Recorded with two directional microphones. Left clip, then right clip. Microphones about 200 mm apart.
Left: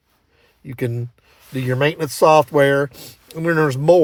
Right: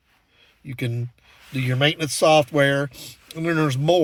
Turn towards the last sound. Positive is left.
turn(degrees=50)  # may be behind; listen again after turning